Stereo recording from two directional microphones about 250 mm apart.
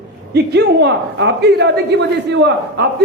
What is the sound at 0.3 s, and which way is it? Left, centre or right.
A woman's voice, right.